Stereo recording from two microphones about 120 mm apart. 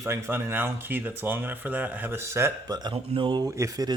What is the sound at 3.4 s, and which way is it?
Speech, 30° right (ahead or behind).